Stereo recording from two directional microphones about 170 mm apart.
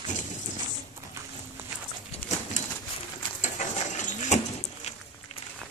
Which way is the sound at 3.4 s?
45° left (ahead or behind).